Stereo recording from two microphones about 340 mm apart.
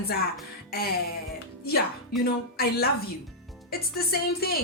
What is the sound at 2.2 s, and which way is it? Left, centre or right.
A woman's voice, left.